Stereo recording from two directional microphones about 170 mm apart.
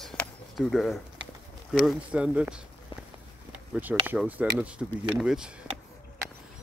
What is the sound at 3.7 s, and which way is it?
Speech, 10° right (ahead or behind).